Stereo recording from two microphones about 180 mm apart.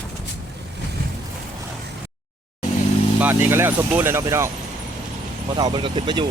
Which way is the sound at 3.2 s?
10° right (ahead or behind).